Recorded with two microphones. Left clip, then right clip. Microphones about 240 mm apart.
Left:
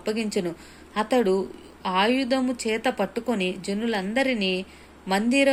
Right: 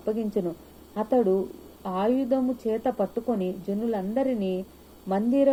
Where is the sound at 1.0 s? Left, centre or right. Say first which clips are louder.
Left 1 dB; left.